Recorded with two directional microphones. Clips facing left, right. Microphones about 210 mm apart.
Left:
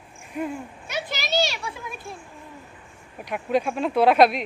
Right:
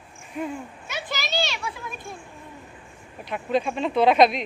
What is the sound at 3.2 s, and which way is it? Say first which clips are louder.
Speech: left 1 dB; 10° left (ahead or behind).